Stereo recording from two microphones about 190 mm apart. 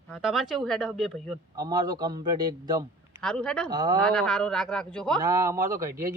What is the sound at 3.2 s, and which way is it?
Speech, 5° left (ahead or behind).